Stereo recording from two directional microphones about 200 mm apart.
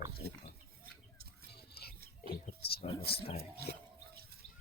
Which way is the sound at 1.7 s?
50° left (ahead or behind).